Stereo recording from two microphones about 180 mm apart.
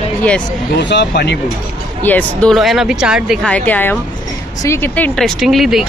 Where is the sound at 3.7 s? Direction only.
10° left (ahead or behind).